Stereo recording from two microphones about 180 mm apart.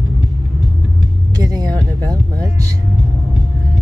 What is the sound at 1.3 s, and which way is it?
Vehicle, 20° right (ahead or behind).